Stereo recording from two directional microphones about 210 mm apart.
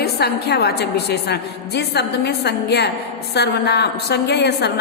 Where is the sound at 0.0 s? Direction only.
50° left (ahead or behind).